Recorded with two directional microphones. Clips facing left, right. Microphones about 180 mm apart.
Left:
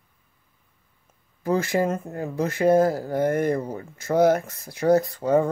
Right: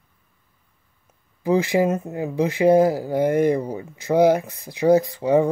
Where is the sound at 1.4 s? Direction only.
15° right (ahead or behind).